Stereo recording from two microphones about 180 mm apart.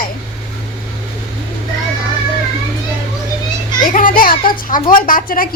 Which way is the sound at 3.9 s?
50° left (ahead or behind).